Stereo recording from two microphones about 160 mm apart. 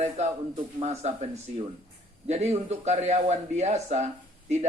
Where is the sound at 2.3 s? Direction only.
40° right (ahead or behind).